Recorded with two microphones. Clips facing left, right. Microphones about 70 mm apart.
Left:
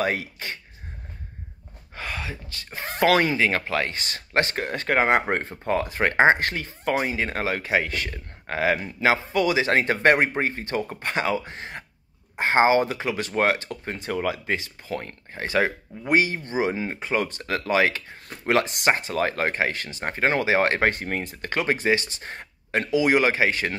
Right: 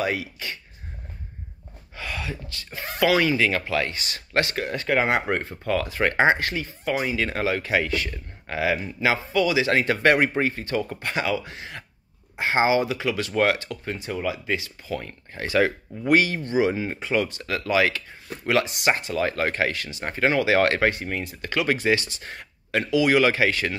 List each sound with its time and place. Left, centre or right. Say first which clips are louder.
0.0 s speech: left 1 dB; left
2.0 s speech: even; left
20.9 s speech: left 1 dB; left